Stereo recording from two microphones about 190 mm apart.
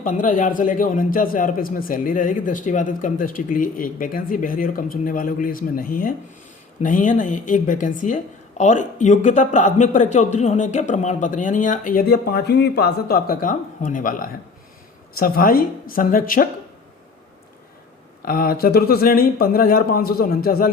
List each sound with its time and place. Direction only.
0.0 s a man's voice: 45° left (ahead or behind)
18.3 s a man's voice: 50° left (ahead or behind)